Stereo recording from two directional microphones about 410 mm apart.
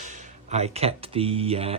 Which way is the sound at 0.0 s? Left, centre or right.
Centre.